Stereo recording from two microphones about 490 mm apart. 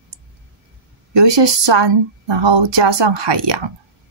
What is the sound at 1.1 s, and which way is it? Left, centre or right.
A woman's voice, right.